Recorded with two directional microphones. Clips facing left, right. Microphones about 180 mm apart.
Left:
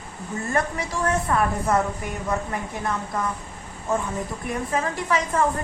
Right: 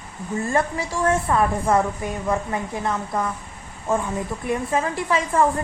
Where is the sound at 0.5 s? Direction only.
30° right (ahead or behind).